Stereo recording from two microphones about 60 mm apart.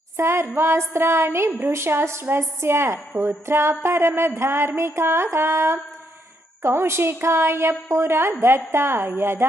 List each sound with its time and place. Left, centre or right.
0.2 s a woman's voice: right